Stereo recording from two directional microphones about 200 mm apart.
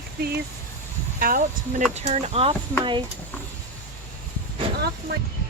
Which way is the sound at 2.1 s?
35° right (ahead or behind).